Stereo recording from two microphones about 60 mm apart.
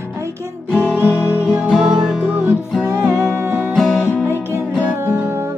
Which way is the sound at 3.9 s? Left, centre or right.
Left.